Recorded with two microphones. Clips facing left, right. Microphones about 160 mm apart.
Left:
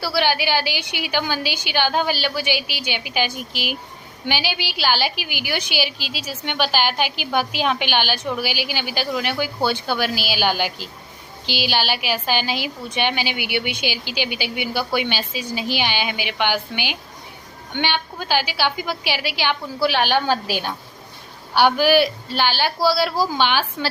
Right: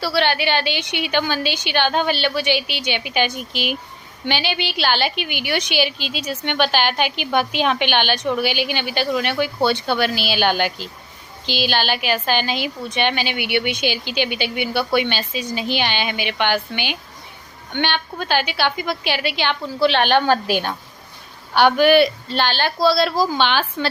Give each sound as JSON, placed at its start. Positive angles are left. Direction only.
{"t": 0.0, "sound": "a woman's voice", "side_deg": 10}
{"t": 8.4, "sound": "a woman's voice", "side_deg": -55}
{"t": 8.7, "sound": "a woman's voice", "side_deg": 5}
{"t": 13.9, "sound": "a woman's voice", "side_deg": -55}
{"t": 14.2, "sound": "a woman's voice", "side_deg": 10}
{"t": 21.5, "sound": "a woman's voice", "side_deg": 5}